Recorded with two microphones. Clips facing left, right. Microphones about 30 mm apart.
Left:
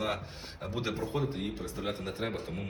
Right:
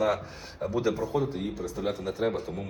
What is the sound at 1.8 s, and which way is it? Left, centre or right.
Speech, centre.